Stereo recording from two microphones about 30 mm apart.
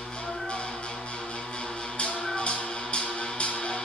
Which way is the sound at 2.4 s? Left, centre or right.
Left.